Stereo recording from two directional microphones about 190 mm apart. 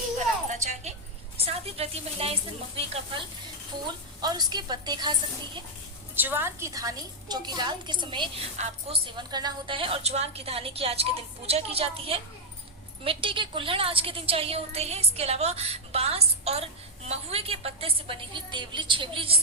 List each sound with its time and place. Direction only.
0.4 s music: 40° right (ahead or behind)
1.4 s a woman's voice: 30° right (ahead or behind)
6.1 s a woman's voice: 10° right (ahead or behind)
8.5 s a woman's voice: 35° right (ahead or behind)
9.1 s a woman's voice: 20° right (ahead or behind)